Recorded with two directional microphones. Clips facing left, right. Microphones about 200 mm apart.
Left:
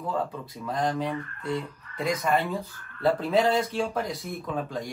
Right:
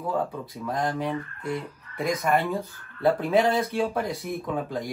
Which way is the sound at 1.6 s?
10° right (ahead or behind).